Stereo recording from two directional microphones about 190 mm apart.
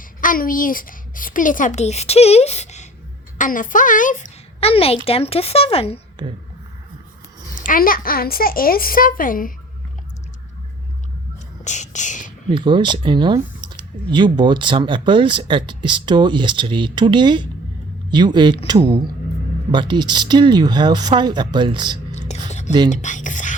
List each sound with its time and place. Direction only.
0.2 s a child's voice: 45° left (ahead or behind); by 6.0 s 30° left (ahead or behind)
6.2 s speech: 25° right (ahead or behind)
7.6 s a woman's voice: 45° left (ahead or behind)
11.6 s whispering: 40° left (ahead or behind)
12.5 s speech: 25° right (ahead or behind)
19.7 s speech: 25° right (ahead or behind)
22.1 s a sound: 35° left (ahead or behind)
22.9 s speech: 40° left (ahead or behind)